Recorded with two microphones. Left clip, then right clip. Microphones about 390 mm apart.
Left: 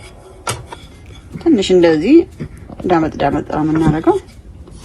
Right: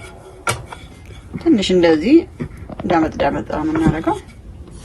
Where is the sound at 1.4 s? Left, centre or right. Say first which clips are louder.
Left 3 dB; centre.